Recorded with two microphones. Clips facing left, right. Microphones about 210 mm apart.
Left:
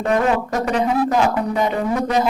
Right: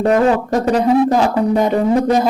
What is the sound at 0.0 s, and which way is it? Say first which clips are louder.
Speech: right 5 dB; 35° right (ahead or behind).